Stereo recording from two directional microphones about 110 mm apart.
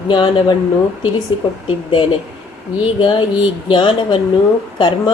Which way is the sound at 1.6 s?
50° left (ahead or behind).